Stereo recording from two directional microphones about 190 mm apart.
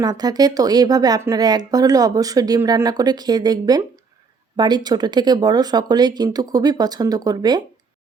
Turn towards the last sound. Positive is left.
turn(degrees=-20)  # may be behind; listen again after turning